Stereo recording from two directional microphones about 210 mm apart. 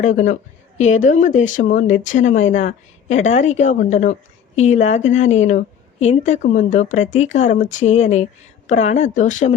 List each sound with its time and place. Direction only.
0.0 s speech: 35° left (ahead or behind)